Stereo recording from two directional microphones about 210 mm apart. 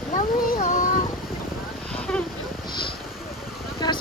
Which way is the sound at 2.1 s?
10° left (ahead or behind).